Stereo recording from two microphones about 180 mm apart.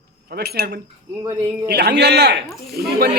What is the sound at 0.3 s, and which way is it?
Speech, 60° right (ahead or behind).